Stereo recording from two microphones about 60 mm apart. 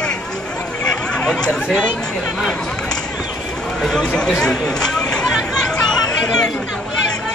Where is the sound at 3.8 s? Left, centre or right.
Centre.